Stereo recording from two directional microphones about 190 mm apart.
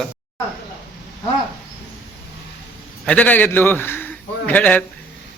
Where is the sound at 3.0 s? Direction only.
5° left (ahead or behind).